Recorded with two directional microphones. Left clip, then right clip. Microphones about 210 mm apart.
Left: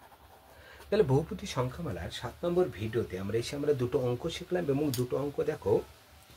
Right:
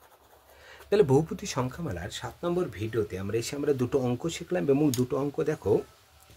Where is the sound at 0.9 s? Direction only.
45° right (ahead or behind).